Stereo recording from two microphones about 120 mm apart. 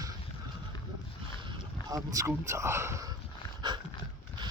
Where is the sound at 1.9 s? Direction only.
30° right (ahead or behind).